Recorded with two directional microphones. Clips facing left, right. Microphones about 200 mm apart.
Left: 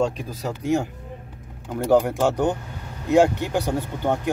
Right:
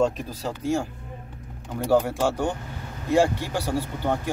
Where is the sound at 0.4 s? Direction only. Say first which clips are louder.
Left 3 dB; 15° left (ahead or behind).